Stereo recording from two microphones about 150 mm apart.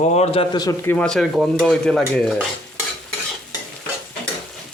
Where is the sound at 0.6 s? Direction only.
20° left (ahead or behind).